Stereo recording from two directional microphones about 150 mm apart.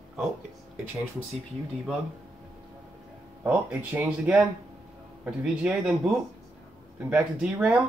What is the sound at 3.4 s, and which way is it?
Female singing, 10° right (ahead or behind).